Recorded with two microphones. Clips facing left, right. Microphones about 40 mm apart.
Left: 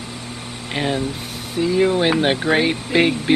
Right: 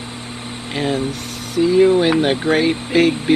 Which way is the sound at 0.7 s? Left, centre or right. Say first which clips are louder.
Right 1 dB; left.